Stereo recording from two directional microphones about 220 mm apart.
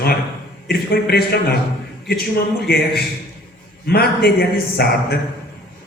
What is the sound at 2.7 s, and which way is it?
Speech, 45° left (ahead or behind).